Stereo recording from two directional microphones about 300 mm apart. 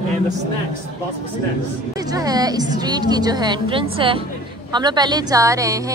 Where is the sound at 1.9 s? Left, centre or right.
Centre.